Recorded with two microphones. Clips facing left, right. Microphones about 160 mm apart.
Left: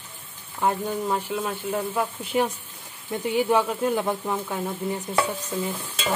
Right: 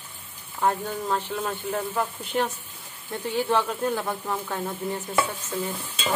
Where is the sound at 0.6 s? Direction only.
10° left (ahead or behind).